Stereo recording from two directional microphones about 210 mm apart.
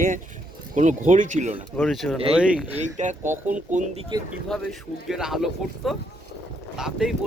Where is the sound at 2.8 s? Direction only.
35° right (ahead or behind).